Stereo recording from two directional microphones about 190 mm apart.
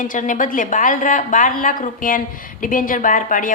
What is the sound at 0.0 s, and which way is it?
A woman's voice, 45° left (ahead or behind).